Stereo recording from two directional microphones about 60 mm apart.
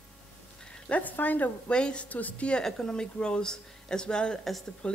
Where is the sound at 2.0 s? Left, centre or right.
Left.